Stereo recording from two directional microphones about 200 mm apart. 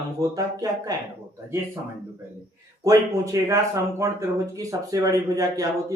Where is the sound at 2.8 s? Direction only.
15° right (ahead or behind).